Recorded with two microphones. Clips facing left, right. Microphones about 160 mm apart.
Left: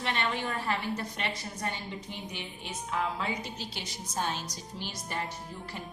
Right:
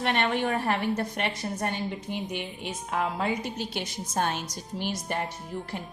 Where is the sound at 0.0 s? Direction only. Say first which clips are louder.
Right 6 dB; 55° right (ahead or behind).